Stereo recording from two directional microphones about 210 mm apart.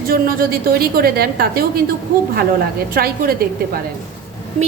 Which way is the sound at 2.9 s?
45° right (ahead or behind).